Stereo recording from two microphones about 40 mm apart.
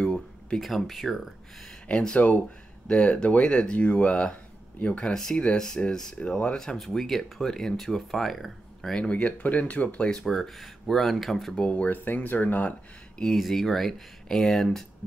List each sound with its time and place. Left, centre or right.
0.0 s a sound: centre
0.6 s speech: centre
1.9 s speech: left
2.1 s speech: left
2.9 s speech: left
6.1 s speech: left
6.6 s speech: centre
8.9 s speech: left
9.2 s speech: left
10.2 s speech: centre
11.5 s speech: left
11.9 s speech: left
13.5 s speech: centre